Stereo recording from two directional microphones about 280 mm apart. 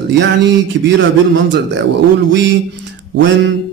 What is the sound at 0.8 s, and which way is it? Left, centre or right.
Speech, right.